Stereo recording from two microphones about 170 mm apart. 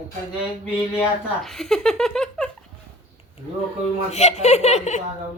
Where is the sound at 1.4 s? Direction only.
Centre (ahead or behind).